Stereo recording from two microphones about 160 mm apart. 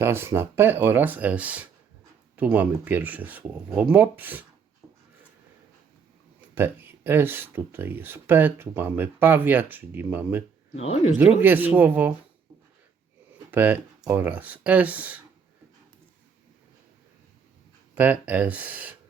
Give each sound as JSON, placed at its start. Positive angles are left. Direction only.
{"t": 0.0, "sound": "speech", "side_deg": -15}
{"t": 6.5, "sound": "speech", "side_deg": -15}
{"t": 10.8, "sound": "speech", "side_deg": 40}
{"t": 11.2, "sound": "speech", "side_deg": -10}
{"t": 13.5, "sound": "speech", "side_deg": -10}
{"t": 17.9, "sound": "speech", "side_deg": -10}